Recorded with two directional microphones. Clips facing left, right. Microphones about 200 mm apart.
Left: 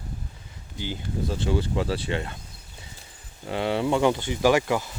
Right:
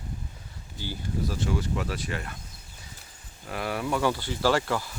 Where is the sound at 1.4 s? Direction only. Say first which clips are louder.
Left 4 dB; 30° left (ahead or behind).